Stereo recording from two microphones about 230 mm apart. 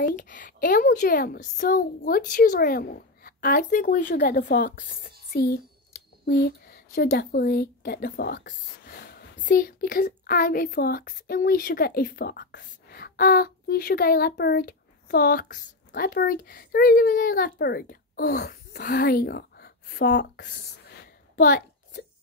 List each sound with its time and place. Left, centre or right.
0.0 s a woman's voice: left